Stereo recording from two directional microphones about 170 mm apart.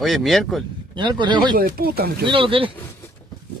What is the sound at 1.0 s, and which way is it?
Speech, 25° right (ahead or behind).